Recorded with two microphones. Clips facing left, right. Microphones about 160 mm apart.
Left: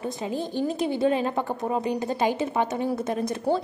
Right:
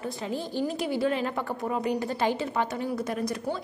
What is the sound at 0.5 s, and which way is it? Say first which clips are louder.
A woman's voice: left 2 dB; 25° left (ahead or behind).